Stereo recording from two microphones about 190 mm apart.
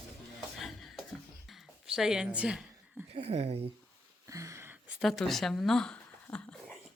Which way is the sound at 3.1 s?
35° right (ahead or behind).